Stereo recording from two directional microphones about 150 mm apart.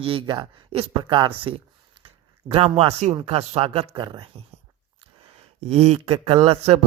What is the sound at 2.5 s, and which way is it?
Speech, 40° right (ahead or behind).